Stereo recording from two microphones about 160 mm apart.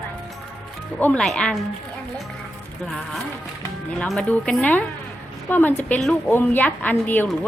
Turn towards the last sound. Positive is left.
turn(degrees=10)  # may be behind; listen again after turning